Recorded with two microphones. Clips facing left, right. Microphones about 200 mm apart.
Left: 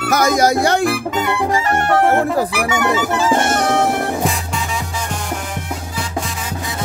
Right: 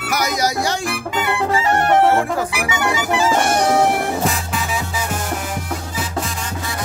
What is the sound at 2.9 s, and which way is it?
Music, 15° right (ahead or behind).